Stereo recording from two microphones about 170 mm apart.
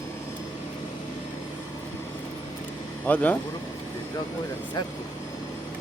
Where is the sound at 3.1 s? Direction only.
10° left (ahead or behind).